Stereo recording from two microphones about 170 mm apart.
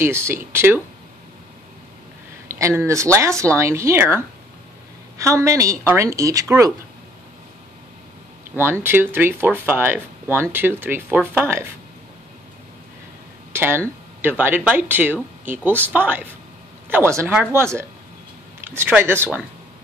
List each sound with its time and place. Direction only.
0.0 s speech: 15° right (ahead or behind)
2.4 s speech: 15° right (ahead or behind)
8.5 s speech: 15° right (ahead or behind)
13.5 s speech: 15° right (ahead or behind)